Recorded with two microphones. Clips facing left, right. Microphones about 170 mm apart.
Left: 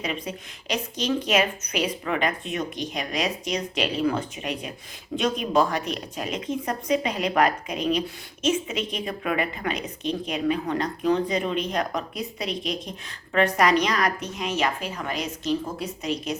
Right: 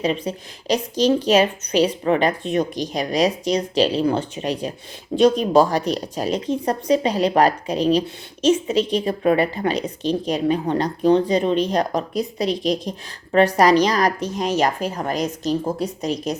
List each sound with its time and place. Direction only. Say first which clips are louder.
0.0 s a woman's voice: right 8 dB; 35° right (ahead or behind)